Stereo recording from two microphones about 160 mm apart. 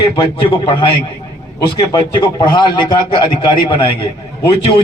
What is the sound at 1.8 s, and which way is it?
A man's voice, 25° left (ahead or behind).